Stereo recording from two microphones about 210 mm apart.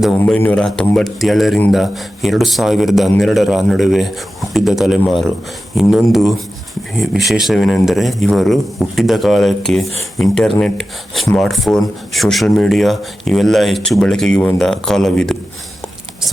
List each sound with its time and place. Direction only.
0.2 s speech: 10° left (ahead or behind)